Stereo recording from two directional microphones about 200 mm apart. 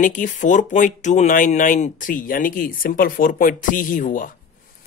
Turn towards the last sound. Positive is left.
turn(degrees=40)  # may be behind; listen again after turning